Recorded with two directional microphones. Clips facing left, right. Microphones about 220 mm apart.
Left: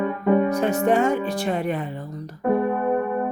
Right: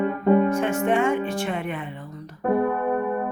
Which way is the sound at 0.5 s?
40° left (ahead or behind).